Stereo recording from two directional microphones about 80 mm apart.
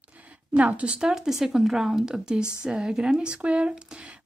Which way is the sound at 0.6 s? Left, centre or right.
Centre.